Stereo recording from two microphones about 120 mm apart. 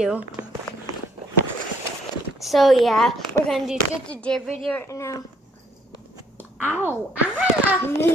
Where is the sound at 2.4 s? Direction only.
Centre (ahead or behind).